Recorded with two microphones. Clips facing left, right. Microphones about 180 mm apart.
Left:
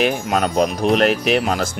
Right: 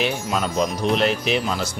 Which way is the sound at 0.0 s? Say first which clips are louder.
Left 5 dB; 55° left (ahead or behind).